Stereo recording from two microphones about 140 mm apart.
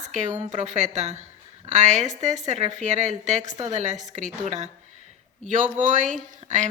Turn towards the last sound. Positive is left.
turn(degrees=-60)  # may be behind; listen again after turning